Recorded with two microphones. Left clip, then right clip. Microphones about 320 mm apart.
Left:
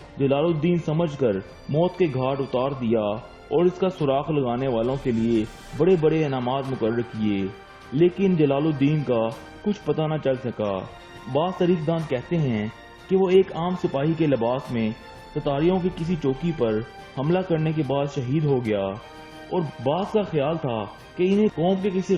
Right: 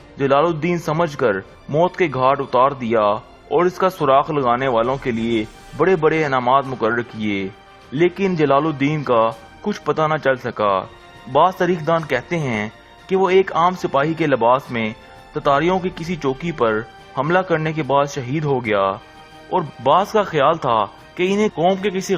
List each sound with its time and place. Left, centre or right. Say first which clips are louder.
0.2 s a man's voice: right 6 dB; right
8.0 s a man's voice: right 3 dB; right